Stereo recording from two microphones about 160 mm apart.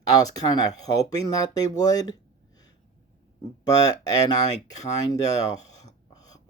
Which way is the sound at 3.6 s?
25° left (ahead or behind).